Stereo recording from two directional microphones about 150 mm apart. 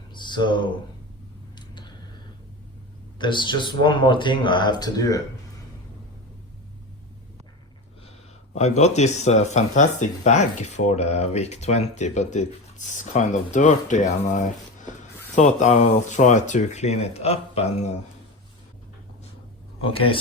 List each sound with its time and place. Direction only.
0.1 s speech: 30° left (ahead or behind)
3.2 s speech: 30° left (ahead or behind)
8.5 s speech: 50° left (ahead or behind)
19.8 s speech: 35° left (ahead or behind)